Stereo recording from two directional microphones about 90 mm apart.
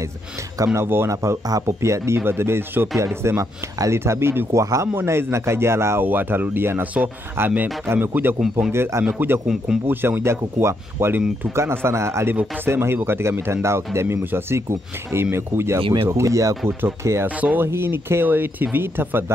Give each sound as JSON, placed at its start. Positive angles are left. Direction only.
{"t": 0.7, "sound": "speech", "side_deg": -30}
{"t": 8.4, "sound": "speech", "side_deg": -5}
{"t": 8.7, "sound": "speech", "side_deg": -25}
{"t": 17.3, "sound": "speech", "side_deg": -15}
{"t": 17.6, "sound": "speech", "side_deg": -25}